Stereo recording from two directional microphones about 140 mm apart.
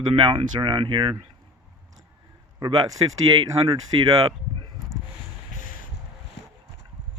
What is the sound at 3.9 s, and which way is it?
Speech, 40° right (ahead or behind).